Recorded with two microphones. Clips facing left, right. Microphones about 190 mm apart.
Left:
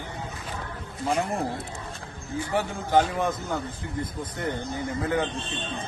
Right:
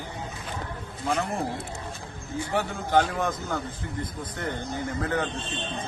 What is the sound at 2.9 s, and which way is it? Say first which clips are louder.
Speech: left 1 dB; 5° left (ahead or behind).